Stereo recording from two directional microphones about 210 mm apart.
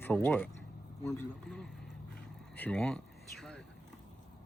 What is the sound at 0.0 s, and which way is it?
A man's voice, 5° left (ahead or behind).